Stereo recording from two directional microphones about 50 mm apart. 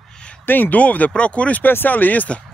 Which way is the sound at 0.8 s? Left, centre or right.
Left.